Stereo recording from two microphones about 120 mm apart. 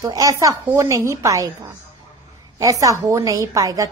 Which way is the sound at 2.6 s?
30° right (ahead or behind).